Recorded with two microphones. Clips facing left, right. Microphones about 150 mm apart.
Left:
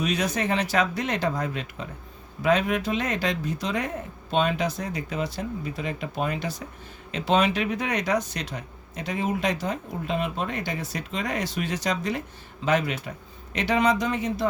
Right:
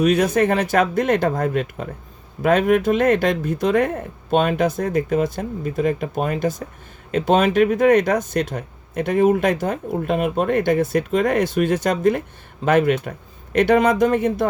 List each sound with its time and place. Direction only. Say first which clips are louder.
0.0 s speech: right 10 dB; 55° right (ahead or behind)